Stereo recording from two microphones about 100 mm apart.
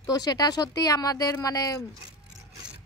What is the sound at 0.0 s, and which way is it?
Speech, 40° left (ahead or behind).